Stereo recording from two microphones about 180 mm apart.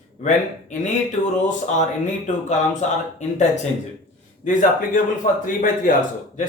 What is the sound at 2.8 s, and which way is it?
Speech, 40° left (ahead or behind).